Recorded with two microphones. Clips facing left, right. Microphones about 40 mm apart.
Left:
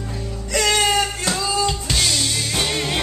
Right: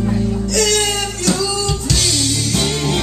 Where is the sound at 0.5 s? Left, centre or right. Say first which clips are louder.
Left 1 dB; centre.